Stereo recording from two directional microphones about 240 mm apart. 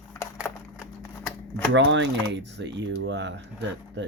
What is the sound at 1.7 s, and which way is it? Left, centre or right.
Speech, right.